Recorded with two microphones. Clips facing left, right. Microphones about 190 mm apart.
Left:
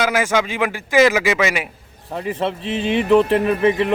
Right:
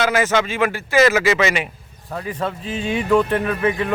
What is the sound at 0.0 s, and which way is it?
A man's voice, 10° left (ahead or behind).